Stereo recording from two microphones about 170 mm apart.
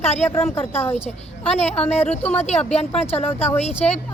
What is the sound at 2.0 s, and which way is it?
Speech, 5° left (ahead or behind).